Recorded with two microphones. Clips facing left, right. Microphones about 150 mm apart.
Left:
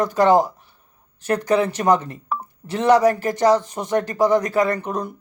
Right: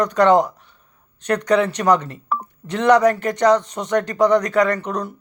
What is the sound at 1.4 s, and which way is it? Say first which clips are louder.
Speech: right 1 dB; 30° left (ahead or behind).